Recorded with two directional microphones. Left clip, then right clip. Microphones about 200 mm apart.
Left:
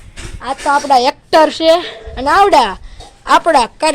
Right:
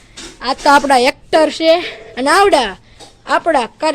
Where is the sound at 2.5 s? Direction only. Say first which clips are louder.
Left 3 dB; centre (ahead or behind).